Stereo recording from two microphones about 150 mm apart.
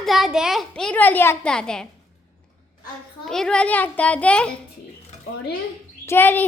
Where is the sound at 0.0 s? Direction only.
Centre (ahead or behind).